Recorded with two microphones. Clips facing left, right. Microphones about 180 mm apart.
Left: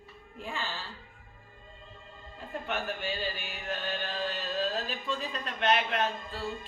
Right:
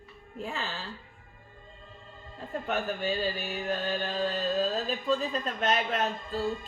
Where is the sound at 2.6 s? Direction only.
40° right (ahead or behind).